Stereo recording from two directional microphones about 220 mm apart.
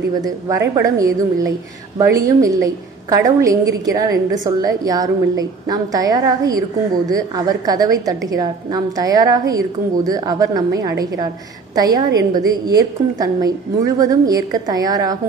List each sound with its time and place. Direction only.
0.2 s a woman's voice: 15° right (ahead or behind)